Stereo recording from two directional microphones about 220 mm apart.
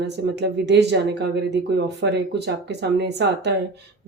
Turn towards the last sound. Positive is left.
turn(degrees=-50)  # may be behind; listen again after turning